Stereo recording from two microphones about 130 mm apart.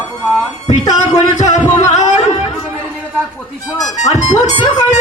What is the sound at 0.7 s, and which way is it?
Speech, 65° left (ahead or behind).